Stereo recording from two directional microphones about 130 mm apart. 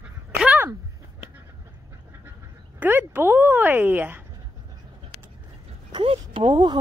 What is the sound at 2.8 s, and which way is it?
A woman's voice, 15° right (ahead or behind).